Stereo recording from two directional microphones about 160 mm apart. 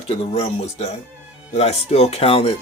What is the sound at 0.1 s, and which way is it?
Speech, 40° left (ahead or behind).